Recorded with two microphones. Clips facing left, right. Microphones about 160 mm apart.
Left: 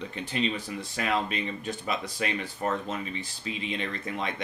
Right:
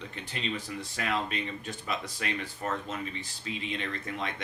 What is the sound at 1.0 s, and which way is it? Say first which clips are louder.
Speech: left 3 dB; 15° left (ahead or behind).